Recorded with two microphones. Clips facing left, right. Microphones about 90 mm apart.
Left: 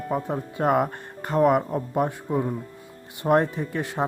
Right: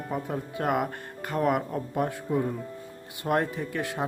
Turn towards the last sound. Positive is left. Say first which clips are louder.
# left 3 dB
turn(degrees=25)  # may be behind; listen again after turning